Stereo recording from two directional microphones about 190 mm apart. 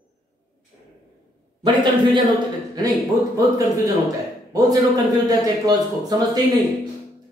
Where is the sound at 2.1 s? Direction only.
20° right (ahead or behind).